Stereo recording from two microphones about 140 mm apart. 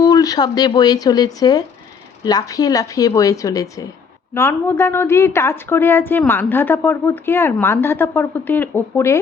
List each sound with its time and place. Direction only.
0.0 s a woman's voice: 25° left (ahead or behind)